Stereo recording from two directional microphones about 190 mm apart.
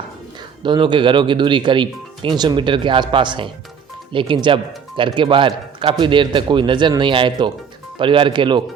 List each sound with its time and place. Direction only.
0.6 s speech: 25° right (ahead or behind)